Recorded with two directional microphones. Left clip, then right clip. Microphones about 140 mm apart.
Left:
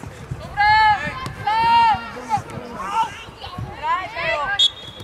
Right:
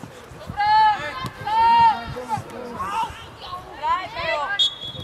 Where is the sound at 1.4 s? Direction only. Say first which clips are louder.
Even; 20° left (ahead or behind).